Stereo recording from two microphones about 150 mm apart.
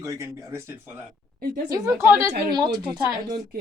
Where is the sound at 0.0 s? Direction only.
20° right (ahead or behind).